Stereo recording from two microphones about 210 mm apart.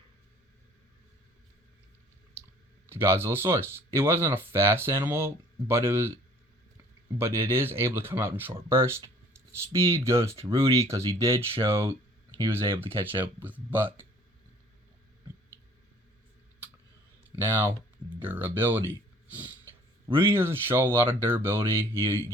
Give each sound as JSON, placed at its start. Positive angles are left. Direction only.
{"t": 2.9, "sound": "speech", "side_deg": -10}
{"t": 7.2, "sound": "speech", "side_deg": -10}
{"t": 10.0, "sound": "speech", "side_deg": -15}
{"t": 12.6, "sound": "speech", "side_deg": -25}
{"t": 13.1, "sound": "speech", "side_deg": -10}
{"t": 17.3, "sound": "speech", "side_deg": -10}